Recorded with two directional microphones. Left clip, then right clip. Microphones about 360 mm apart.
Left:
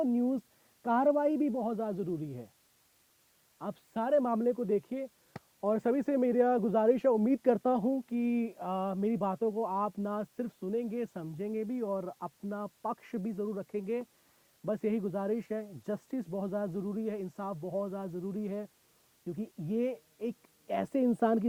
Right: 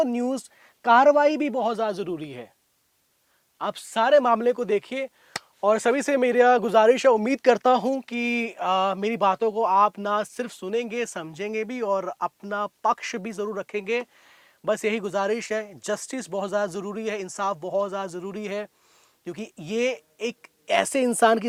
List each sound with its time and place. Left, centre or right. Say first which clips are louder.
0.0 s speech: right 7 dB; centre
3.6 s a woman's voice: right 13 dB; centre